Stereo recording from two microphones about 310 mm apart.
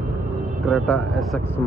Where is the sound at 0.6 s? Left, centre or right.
Centre.